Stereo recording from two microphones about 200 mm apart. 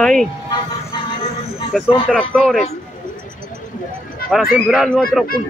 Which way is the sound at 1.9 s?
5° left (ahead or behind).